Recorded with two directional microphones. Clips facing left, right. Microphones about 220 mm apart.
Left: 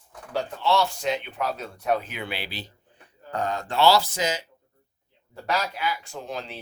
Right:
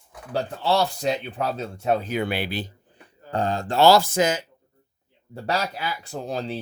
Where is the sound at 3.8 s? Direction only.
50° right (ahead or behind).